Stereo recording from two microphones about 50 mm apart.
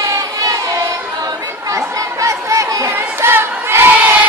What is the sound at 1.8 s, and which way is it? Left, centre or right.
Chatter, right.